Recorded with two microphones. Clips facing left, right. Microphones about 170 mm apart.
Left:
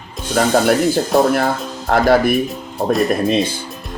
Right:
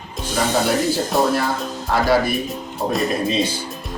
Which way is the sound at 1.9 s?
55° left (ahead or behind).